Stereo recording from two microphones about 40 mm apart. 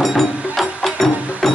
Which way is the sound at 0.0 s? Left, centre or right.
Centre.